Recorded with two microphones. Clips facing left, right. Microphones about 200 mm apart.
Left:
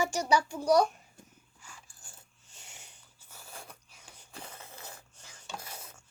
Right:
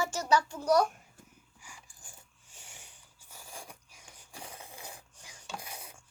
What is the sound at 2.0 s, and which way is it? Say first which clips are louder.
Coin: right 1 dB; 15° right (ahead or behind).